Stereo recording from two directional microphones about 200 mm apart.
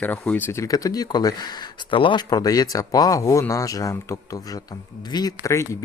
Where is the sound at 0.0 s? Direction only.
10° left (ahead or behind).